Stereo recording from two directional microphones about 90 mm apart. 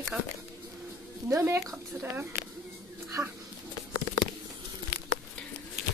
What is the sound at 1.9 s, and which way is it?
Speech, 20° right (ahead or behind).